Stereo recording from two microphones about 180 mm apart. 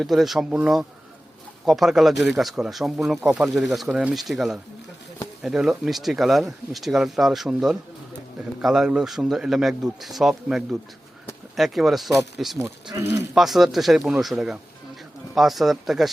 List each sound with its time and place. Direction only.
0.0 s speech: centre (ahead or behind)
12.9 s speech: 15° right (ahead or behind)
13.3 s speech: centre (ahead or behind)